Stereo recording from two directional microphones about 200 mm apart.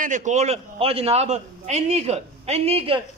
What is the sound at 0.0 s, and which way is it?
A man's voice, 40° right (ahead or behind).